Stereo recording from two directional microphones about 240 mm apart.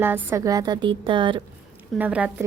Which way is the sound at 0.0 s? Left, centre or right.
Centre.